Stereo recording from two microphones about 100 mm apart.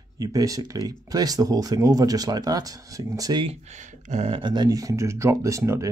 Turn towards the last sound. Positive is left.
turn(degrees=-30)  # may be behind; listen again after turning